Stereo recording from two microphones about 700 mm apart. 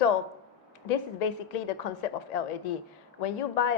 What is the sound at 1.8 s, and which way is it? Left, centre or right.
A woman's voice, left.